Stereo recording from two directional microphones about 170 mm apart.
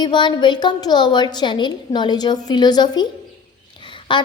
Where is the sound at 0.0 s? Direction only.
25° left (ahead or behind).